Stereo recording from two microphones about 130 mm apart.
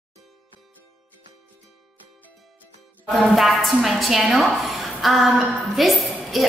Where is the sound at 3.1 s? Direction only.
Centre (ahead or behind).